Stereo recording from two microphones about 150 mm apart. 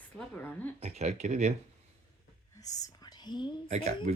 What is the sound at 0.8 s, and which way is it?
Speech, 45° right (ahead or behind).